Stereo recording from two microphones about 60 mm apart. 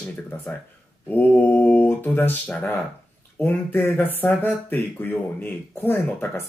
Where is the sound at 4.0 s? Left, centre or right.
Left.